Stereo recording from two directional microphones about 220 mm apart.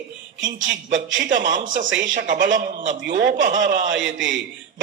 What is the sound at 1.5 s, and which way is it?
A man's voice, 35° right (ahead or behind).